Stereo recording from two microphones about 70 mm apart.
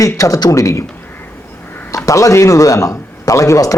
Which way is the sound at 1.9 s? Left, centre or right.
Left.